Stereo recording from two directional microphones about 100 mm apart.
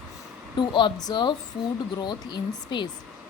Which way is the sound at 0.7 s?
50° left (ahead or behind).